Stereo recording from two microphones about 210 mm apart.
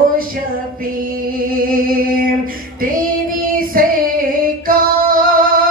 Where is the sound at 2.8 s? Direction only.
40° right (ahead or behind).